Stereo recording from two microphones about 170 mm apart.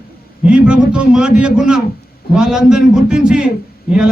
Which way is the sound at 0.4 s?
5° right (ahead or behind).